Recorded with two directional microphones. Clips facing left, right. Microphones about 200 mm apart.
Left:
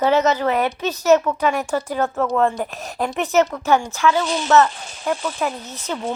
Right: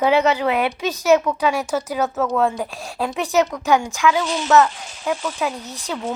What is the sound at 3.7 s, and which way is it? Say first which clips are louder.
Speech: even; 15° right (ahead or behind).